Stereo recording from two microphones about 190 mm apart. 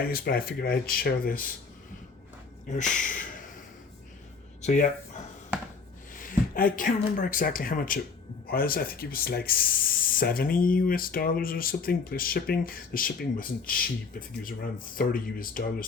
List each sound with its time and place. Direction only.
0.0 s speech: 50° left (ahead or behind)
3.0 s speech: 45° left (ahead or behind)
4.6 s speech: 40° left (ahead or behind)